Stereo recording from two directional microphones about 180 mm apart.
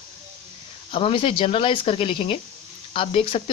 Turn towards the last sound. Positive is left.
turn(degrees=30)  # may be behind; listen again after turning